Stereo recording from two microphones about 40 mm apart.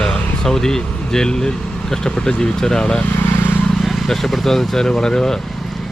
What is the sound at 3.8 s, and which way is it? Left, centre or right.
Speech, centre.